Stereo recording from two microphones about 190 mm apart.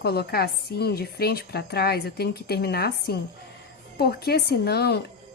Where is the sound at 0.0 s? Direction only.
55° left (ahead or behind).